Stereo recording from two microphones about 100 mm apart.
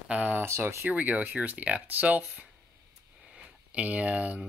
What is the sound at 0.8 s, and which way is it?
Speech, 15° right (ahead or behind).